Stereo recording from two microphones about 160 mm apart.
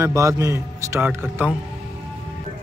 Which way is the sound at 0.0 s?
20° right (ahead or behind).